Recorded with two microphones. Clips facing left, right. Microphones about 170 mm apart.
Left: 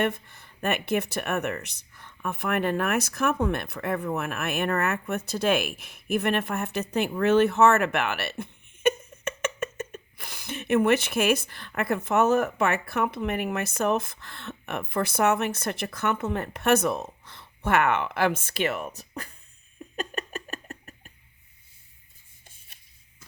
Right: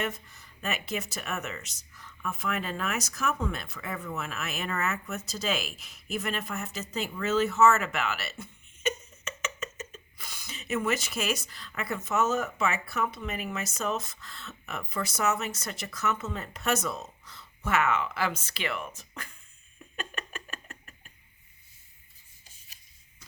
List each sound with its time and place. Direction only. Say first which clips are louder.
0.0 s speech: left 7 dB; 60° left (ahead or behind); by 19.4 s 35° left (ahead or behind)
20.0 s a sound: left 6 dB; 40° left (ahead or behind)
22.4 s rub: left 4 dB; 55° left (ahead or behind)